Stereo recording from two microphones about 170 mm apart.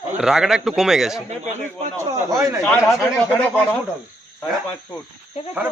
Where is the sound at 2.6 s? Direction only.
5° left (ahead or behind).